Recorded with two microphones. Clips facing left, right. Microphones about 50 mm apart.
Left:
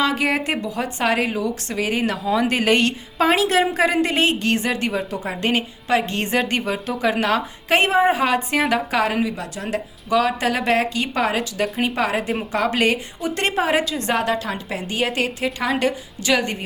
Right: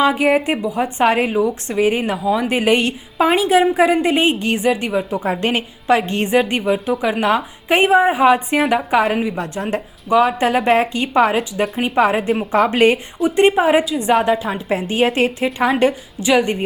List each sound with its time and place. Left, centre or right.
0.0 s a woman's voice: centre
5.1 s a woman's voice: right
9.3 s speech: right
10.1 s a woman's voice: centre
13.2 s a woman's voice: centre
14.7 s a woman's voice: right